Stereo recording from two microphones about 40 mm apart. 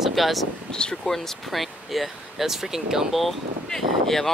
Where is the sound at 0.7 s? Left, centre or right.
Centre.